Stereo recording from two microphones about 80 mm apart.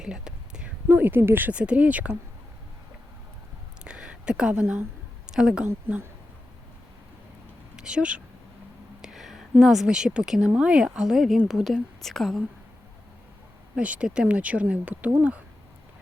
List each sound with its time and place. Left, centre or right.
0.0 s whispering: centre
0.9 s speech: right
3.8 s a sound: centre
7.8 s a woman's voice: centre
13.7 s speech: centre